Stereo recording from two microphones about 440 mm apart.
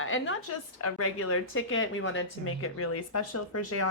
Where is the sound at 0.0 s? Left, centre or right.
Left.